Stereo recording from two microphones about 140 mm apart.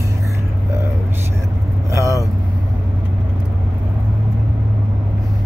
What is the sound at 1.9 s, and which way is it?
Vehicle, 20° right (ahead or behind).